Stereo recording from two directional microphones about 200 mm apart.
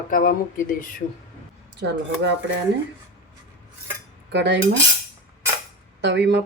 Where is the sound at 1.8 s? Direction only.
60° right (ahead or behind).